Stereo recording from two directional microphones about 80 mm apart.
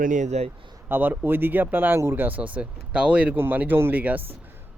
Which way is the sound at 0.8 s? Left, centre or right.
Right.